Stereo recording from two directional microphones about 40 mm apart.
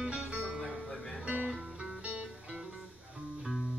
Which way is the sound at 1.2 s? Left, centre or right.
Right.